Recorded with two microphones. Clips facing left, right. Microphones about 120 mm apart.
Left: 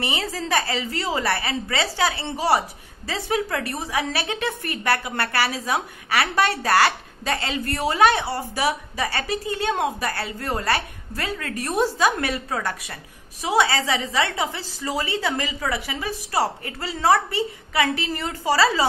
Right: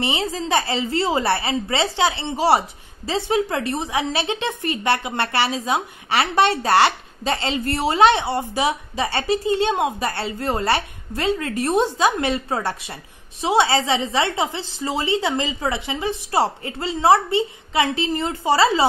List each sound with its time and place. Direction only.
0.0 s a woman's voice: 25° right (ahead or behind)